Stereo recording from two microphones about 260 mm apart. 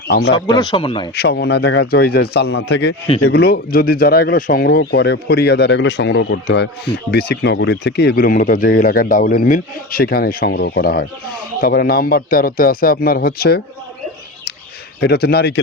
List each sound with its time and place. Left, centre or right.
0.1 s speech: left
0.3 s speech: centre
1.1 s speech: left
15.0 s speech: left